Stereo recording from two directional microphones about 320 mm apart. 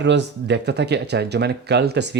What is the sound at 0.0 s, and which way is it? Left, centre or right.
Speech, right.